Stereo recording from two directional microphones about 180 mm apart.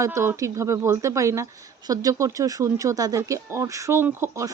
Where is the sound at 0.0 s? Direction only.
15° right (ahead or behind).